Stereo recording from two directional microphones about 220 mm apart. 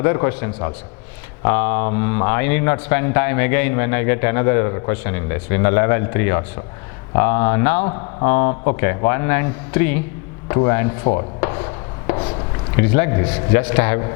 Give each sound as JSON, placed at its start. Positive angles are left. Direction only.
{"t": 0.0, "sound": "a man's voice", "side_deg": 15}
{"t": 10.5, "sound": "chopping", "side_deg": 15}
{"t": 12.8, "sound": "a man's voice", "side_deg": 15}